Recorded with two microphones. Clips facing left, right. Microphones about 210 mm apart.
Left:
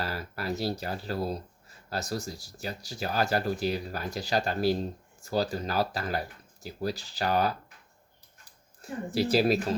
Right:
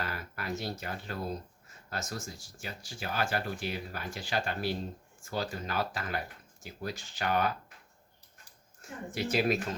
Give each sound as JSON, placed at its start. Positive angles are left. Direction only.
{"t": 0.0, "sound": "speech", "side_deg": 35}
{"t": 8.8, "sound": "speech", "side_deg": 35}